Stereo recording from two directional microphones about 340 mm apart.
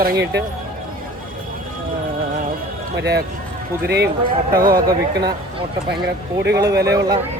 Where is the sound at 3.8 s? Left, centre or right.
Right.